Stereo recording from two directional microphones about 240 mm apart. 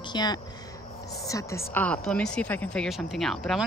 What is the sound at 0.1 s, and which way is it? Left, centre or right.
A woman's voice, centre.